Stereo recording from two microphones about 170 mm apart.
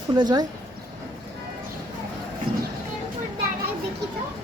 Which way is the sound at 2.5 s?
65° right (ahead or behind).